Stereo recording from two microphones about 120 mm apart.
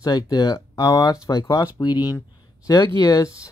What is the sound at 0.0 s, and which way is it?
Speech, 35° left (ahead or behind).